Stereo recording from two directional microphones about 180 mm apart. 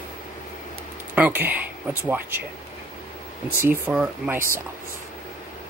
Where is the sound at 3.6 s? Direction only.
10° right (ahead or behind).